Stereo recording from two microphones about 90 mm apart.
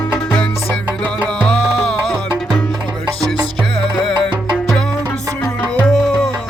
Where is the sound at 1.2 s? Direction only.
10° left (ahead or behind).